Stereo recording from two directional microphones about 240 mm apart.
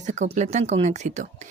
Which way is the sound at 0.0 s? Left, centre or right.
Right.